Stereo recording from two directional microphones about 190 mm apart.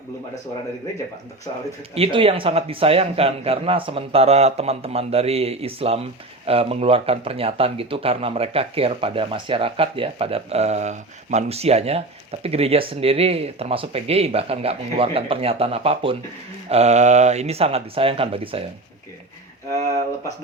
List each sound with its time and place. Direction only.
2.0 s speech: 30° right (ahead or behind)